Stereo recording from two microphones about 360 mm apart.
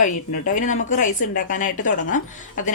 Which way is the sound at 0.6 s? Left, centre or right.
Centre.